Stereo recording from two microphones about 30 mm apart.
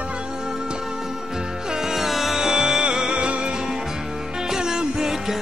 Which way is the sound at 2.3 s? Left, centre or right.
Centre.